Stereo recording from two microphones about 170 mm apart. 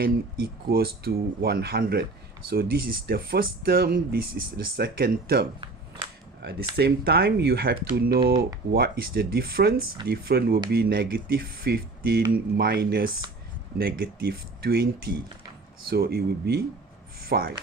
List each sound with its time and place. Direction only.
0.0 s speech: 65° right (ahead or behind)